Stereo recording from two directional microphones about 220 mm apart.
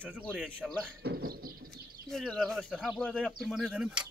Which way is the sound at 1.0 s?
45° right (ahead or behind).